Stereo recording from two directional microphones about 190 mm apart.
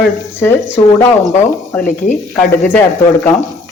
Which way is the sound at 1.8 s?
45° left (ahead or behind).